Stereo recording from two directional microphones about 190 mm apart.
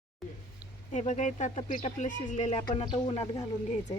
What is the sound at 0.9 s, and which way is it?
Speech, 40° left (ahead or behind).